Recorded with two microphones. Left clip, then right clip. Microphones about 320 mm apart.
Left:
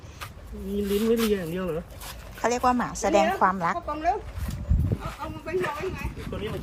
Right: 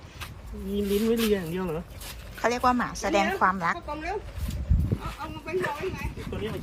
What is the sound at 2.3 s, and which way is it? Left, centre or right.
A woman's voice, centre.